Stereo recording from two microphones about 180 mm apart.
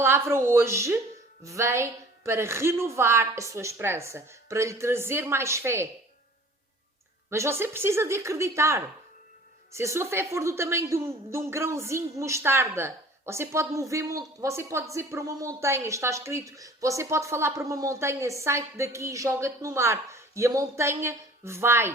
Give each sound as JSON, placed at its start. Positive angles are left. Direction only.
{"t": 0.0, "sound": "a woman's voice", "side_deg": -15}
{"t": 7.3, "sound": "a woman's voice", "side_deg": -15}